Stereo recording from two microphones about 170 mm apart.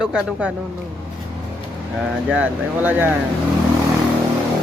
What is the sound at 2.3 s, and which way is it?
Speech, 10° right (ahead or behind).